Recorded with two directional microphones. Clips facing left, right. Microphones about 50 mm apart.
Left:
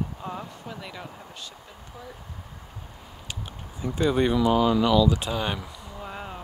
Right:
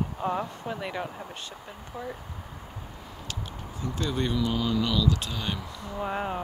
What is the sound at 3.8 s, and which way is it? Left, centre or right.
Speech, centre.